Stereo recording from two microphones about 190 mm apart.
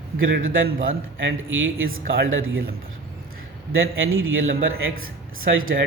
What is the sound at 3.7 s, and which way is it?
Speech, 90° right.